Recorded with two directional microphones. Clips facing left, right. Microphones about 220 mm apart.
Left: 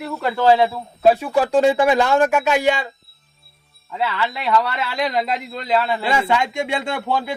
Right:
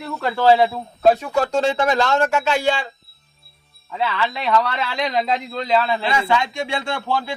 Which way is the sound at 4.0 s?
5° left (ahead or behind).